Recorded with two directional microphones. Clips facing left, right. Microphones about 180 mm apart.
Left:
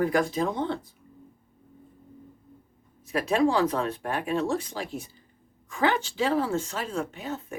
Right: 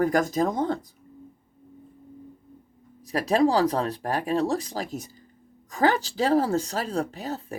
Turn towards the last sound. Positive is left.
turn(degrees=-35)  # may be behind; listen again after turning